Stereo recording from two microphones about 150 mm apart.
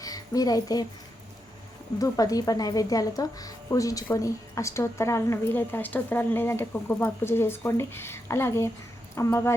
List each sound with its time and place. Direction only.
0.0 s speech: 25° left (ahead or behind)
2.0 s a woman's voice: 25° left (ahead or behind)